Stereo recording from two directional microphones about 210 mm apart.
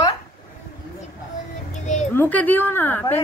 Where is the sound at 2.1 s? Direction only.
10° left (ahead or behind).